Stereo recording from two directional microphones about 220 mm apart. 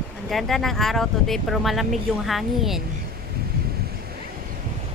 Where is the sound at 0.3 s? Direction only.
Centre (ahead or behind).